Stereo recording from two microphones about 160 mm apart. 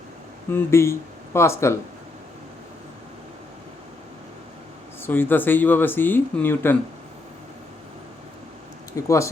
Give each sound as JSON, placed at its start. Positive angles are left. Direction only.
{"t": 0.5, "sound": "speech", "side_deg": 15}
{"t": 5.0, "sound": "speech", "side_deg": 15}
{"t": 8.9, "sound": "speech", "side_deg": 20}